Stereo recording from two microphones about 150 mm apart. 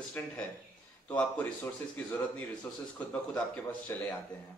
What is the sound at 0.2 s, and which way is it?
A man's voice, 10° left (ahead or behind).